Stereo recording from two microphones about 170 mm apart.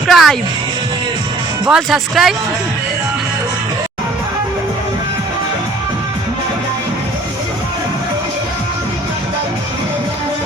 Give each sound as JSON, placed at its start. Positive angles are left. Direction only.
{"t": 0.1, "sound": "speech", "side_deg": 0}
{"t": 1.6, "sound": "speech", "side_deg": -5}